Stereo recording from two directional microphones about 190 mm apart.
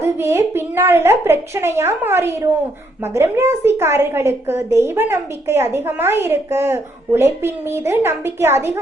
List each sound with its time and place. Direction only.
0.0 s a woman's voice: 15° right (ahead or behind)